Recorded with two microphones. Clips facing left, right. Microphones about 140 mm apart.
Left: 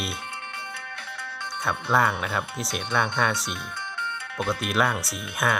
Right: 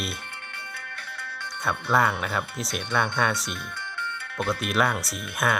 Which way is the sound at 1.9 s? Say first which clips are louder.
Even; centre (ahead or behind).